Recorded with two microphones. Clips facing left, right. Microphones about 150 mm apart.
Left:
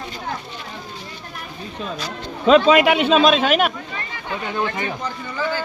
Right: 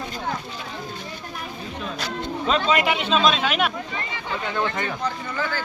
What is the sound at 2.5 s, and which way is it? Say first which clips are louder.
Speech: left 9 dB; 80° left.